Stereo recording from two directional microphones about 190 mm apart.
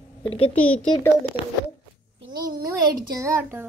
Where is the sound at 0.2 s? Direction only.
30° left (ahead or behind).